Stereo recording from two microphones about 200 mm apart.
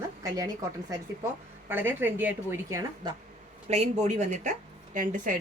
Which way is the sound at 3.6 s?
35° right (ahead or behind).